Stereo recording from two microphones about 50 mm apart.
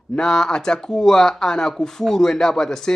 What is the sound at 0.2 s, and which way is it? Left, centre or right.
Speech, centre.